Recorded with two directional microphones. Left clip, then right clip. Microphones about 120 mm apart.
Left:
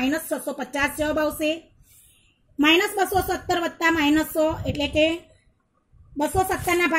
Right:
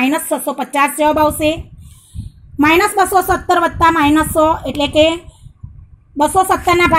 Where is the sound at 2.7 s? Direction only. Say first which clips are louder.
Right 9 dB; 25° right (ahead or behind).